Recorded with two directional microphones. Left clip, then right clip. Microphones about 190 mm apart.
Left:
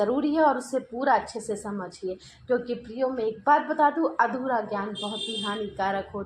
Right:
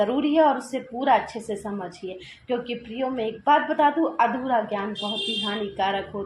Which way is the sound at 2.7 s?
35° left (ahead or behind).